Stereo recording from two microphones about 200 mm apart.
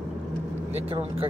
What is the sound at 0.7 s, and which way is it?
Speech, 30° right (ahead or behind).